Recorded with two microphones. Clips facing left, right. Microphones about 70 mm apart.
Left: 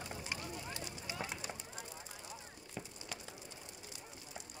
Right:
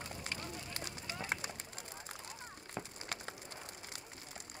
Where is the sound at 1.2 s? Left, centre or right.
Right.